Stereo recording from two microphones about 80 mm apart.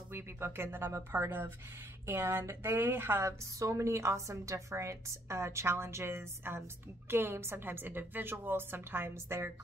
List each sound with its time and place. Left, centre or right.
0.1 s a woman's voice: right